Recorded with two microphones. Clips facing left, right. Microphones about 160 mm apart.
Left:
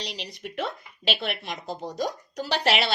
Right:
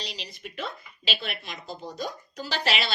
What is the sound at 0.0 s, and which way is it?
Speech, 65° left (ahead or behind).